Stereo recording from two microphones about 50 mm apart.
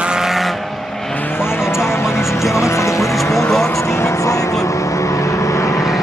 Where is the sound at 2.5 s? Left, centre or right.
Left.